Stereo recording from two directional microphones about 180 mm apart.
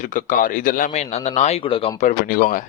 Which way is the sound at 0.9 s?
35° left (ahead or behind).